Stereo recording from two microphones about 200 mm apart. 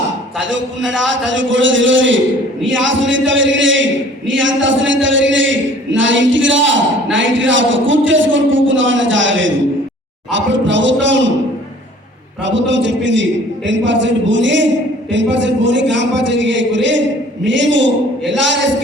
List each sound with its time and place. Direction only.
0.9 s a man's voice: 70° right (ahead or behind)
12.4 s a man's voice: 65° right (ahead or behind)